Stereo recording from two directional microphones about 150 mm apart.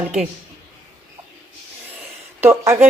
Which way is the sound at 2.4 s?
15° right (ahead or behind).